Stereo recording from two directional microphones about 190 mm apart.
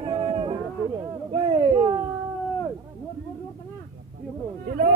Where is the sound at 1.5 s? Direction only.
25° right (ahead or behind).